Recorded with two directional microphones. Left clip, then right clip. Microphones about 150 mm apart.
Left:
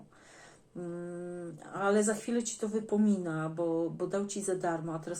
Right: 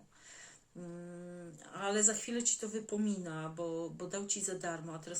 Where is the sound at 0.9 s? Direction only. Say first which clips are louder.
Left 8 dB; 20° right (ahead or behind).